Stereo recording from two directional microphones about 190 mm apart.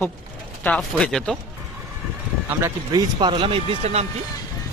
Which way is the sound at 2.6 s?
20° right (ahead or behind).